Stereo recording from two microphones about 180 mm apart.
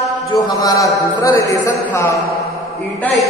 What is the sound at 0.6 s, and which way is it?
Speech, 20° left (ahead or behind).